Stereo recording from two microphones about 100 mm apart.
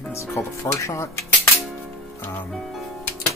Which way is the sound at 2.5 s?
Centre (ahead or behind).